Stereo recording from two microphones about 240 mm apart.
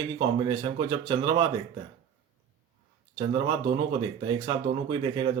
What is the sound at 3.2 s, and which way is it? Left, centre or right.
Speech, centre.